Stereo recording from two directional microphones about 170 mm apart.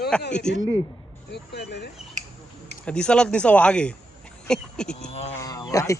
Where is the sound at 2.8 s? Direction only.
5° left (ahead or behind).